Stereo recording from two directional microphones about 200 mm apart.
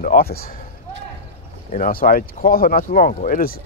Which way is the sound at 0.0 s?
45° left (ahead or behind).